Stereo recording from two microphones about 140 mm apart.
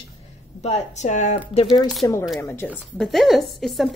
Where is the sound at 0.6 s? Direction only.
55° left (ahead or behind).